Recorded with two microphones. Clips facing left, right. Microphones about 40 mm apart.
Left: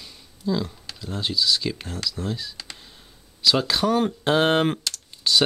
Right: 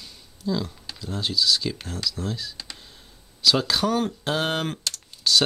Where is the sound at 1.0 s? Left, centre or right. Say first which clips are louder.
Even; centre.